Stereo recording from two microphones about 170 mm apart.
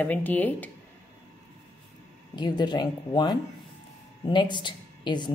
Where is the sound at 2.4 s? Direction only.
25° left (ahead or behind).